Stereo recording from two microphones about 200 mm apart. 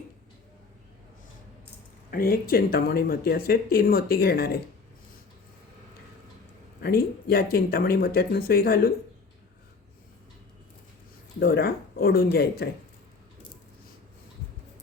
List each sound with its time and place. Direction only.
2.0 s speech: 50° left (ahead or behind)
6.8 s speech: 50° left (ahead or behind)
11.3 s speech: 50° left (ahead or behind)